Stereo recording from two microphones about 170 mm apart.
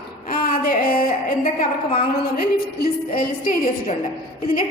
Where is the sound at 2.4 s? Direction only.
60° left (ahead or behind).